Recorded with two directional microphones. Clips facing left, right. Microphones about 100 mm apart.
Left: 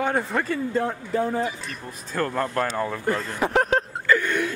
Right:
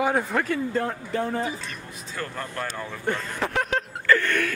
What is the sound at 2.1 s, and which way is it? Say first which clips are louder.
Speech: left 8 dB; 45° left (ahead or behind).